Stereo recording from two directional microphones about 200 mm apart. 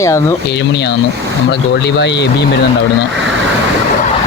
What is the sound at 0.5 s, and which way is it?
A man's voice, 60° left (ahead or behind).